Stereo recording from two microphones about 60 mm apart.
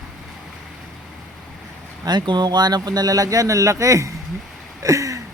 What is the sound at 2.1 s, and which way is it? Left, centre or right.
Speech, right.